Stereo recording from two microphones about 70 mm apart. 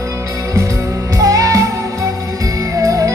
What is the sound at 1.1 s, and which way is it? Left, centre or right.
Music, right.